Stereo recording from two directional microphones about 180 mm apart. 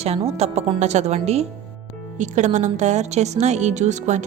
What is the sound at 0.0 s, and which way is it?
Speech, 35° right (ahead or behind).